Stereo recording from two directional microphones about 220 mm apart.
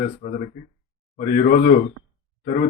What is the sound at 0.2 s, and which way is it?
Speech, 35° left (ahead or behind).